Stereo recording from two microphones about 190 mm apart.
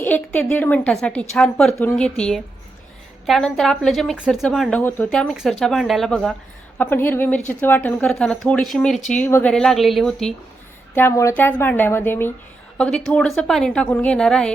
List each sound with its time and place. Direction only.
0.0 s a woman's voice: 10° left (ahead or behind)
10.9 s a woman's voice: 15° left (ahead or behind)